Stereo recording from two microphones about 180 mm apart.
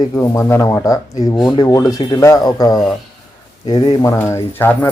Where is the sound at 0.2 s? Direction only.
15° left (ahead or behind).